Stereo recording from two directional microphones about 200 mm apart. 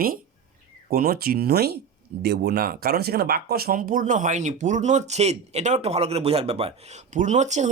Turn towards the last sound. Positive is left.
turn(degrees=-35)  # may be behind; listen again after turning